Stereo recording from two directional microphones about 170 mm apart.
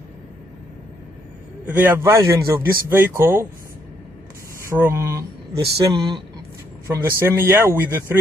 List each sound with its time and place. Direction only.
1.7 s speech: 15° right (ahead or behind)
4.6 s speech: 15° right (ahead or behind)
5.5 s speech: 70° right (ahead or behind)
5.9 s speech: 25° right (ahead or behind)
7.2 s speech: 15° right (ahead or behind)